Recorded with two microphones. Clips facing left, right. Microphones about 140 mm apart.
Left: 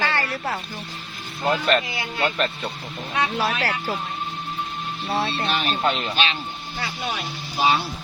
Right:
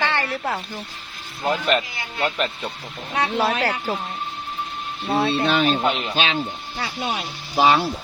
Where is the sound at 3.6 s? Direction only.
15° right (ahead or behind).